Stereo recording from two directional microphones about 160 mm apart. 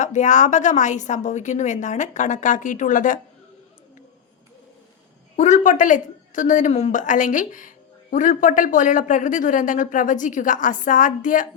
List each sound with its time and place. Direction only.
0.0 s speech: 50° left (ahead or behind)
5.4 s speech: 50° left (ahead or behind)